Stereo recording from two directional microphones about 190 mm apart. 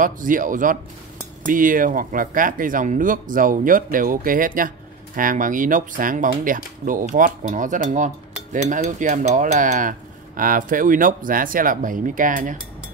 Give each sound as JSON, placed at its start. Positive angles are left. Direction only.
{"t": 0.0, "sound": "speech", "side_deg": -45}